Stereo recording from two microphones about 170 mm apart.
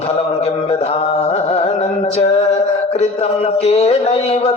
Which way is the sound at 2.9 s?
40° left (ahead or behind).